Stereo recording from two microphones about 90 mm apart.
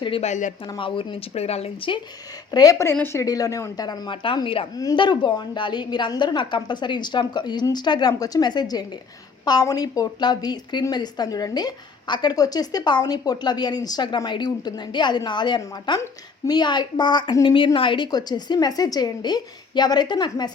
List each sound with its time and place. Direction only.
0.8 s speech: 75° left (ahead or behind)
2.5 s a woman's voice: 45° left (ahead or behind); by 3.2 s 30° left (ahead or behind)
3.2 s a woman's voice: 40° left (ahead or behind); by 4.4 s 70° left (ahead or behind)
4.4 s a woman's voice: 90° left
4.7 s a woman's voice: 45° left (ahead or behind)
4.9 s a woman's voice: 60° left (ahead or behind)
17.4 s a woman's voice: 70° left (ahead or behind)